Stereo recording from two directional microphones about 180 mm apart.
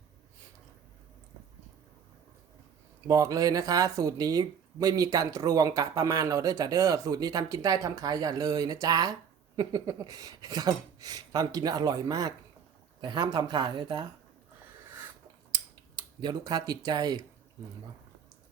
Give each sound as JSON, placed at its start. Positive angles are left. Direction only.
{"t": 3.1, "sound": "speech", "side_deg": -20}
{"t": 15.5, "sound": "speech", "side_deg": -25}